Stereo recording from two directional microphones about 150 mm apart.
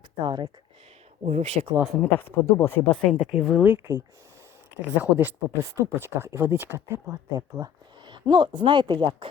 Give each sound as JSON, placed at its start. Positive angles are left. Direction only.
{"t": 0.2, "sound": "speech", "side_deg": -30}
{"t": 1.2, "sound": "speech", "side_deg": -45}
{"t": 2.0, "sound": "speech", "side_deg": 10}
{"t": 3.6, "sound": "speech", "side_deg": -15}